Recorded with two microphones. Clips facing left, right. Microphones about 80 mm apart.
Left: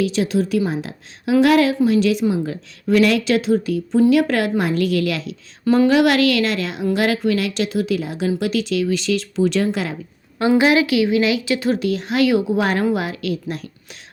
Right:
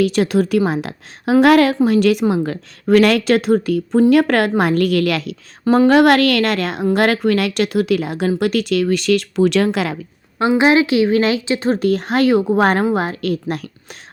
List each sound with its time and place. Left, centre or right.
0.0 s a woman's voice: right
5.6 s a woman's voice: right
5.9 s a woman's voice: right
10.6 s speech: right